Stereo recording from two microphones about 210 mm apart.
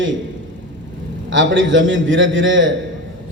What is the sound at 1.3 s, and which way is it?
A man's voice, 65° right (ahead or behind).